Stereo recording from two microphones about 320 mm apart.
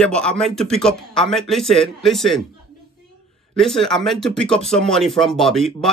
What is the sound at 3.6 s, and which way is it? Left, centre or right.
Speech, centre.